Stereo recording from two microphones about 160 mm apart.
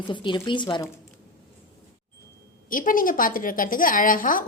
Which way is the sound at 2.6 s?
60° left (ahead or behind).